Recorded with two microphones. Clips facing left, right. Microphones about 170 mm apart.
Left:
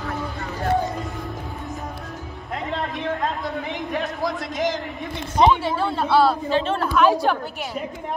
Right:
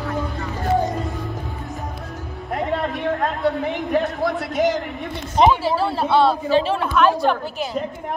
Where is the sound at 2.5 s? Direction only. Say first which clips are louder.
Right 5 dB; 40° right (ahead or behind).